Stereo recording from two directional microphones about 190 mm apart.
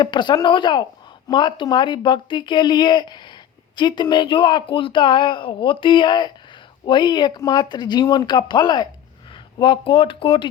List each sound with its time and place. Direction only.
0.0 s speech: 25° left (ahead or behind)